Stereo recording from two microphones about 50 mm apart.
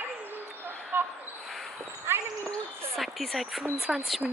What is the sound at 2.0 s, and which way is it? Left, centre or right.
Speech, right.